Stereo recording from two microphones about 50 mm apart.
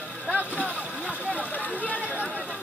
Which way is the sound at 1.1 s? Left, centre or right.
Right.